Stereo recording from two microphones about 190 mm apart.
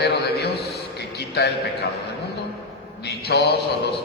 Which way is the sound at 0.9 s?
60° left (ahead or behind).